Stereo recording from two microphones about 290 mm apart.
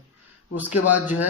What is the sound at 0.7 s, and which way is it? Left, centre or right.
Speech, left.